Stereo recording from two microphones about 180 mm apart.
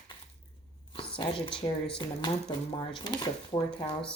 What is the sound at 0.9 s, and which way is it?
Speech, 30° left (ahead or behind).